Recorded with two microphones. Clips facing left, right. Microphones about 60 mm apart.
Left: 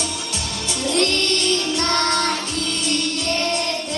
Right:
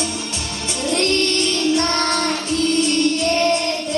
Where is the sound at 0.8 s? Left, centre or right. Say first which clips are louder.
Right 2 dB; right.